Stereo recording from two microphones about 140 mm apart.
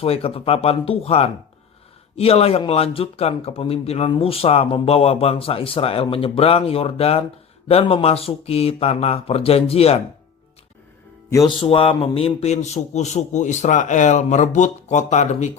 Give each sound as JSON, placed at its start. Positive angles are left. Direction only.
{"t": 0.0, "sound": "a man's voice", "side_deg": 45}
{"t": 11.4, "sound": "a man's voice", "side_deg": 40}